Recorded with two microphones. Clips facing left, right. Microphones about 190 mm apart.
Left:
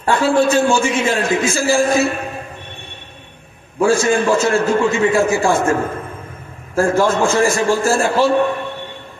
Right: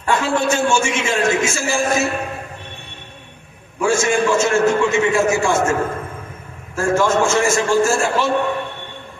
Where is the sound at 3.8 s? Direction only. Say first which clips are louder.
Left 3 dB; 35° left (ahead or behind).